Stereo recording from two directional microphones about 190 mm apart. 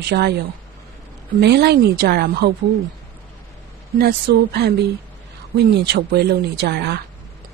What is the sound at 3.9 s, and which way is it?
A woman's voice, 55° right (ahead or behind).